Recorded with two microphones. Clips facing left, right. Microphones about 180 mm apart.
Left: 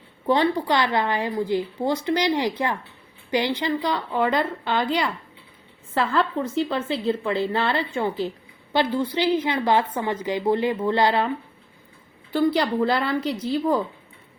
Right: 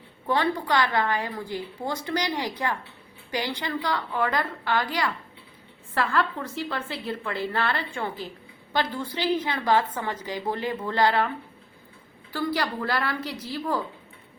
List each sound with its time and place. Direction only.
0.3 s a woman's voice: 20° left (ahead or behind)
12.3 s a woman's voice: 20° left (ahead or behind)